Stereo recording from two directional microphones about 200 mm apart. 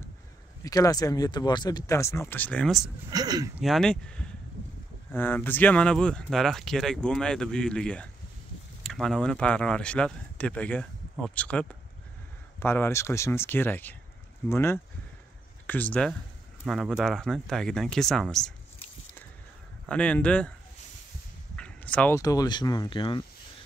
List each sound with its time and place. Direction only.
0.7 s speech: 15° left (ahead or behind); by 2.9 s centre (ahead or behind)
3.1 s speech: 20° right (ahead or behind)
3.5 s speech: centre (ahead or behind)
19.9 s speech: 5° left (ahead or behind)
21.5 s a sound: 5° left (ahead or behind)
22.2 s speech: 20° left (ahead or behind)